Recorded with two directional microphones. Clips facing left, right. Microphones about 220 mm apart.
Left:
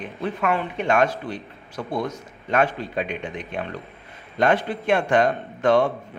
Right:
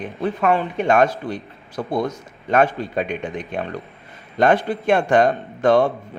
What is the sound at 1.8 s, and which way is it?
A man's voice, 40° right (ahead or behind).